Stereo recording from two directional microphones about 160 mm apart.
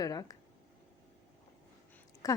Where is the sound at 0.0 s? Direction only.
20° left (ahead or behind).